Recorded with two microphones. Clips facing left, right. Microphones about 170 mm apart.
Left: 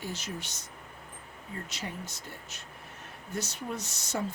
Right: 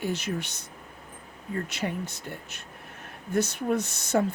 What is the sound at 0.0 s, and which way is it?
A woman's voice, 60° right (ahead or behind).